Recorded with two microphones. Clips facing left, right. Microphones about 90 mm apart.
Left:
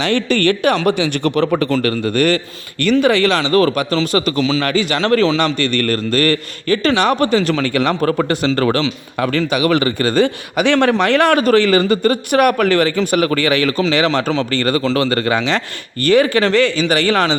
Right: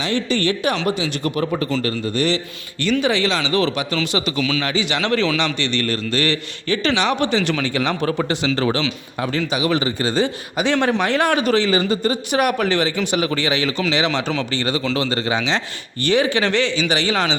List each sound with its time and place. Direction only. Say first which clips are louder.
0.0 s speech: left 5 dB; 60° left (ahead or behind); by 7.7 s 45° left (ahead or behind)
7.7 s speech: left 5 dB; 55° left (ahead or behind)